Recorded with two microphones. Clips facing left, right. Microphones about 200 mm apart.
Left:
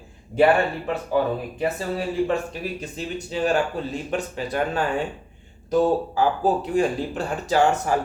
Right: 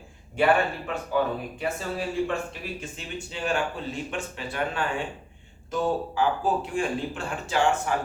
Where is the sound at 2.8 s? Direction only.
40° left (ahead or behind).